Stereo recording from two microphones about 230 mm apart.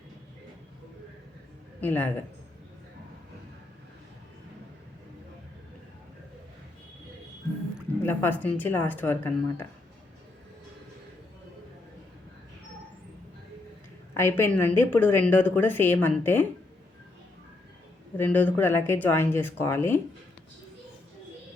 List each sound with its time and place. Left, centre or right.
1.8 s speech: centre
8.0 s speech: centre
14.1 s speech: centre
18.2 s speech: centre